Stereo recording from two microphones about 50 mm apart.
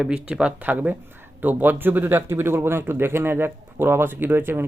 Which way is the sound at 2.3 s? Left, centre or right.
Right.